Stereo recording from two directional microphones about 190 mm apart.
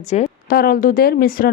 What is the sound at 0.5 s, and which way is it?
Speech, 50° left (ahead or behind).